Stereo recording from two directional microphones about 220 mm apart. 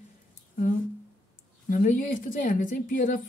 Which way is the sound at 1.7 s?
40° left (ahead or behind).